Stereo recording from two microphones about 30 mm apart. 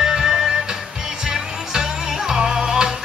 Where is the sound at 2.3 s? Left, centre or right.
Right.